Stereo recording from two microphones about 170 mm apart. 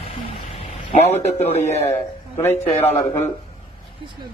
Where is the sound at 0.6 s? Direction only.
35° left (ahead or behind).